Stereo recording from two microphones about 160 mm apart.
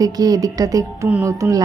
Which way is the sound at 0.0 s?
25° right (ahead or behind).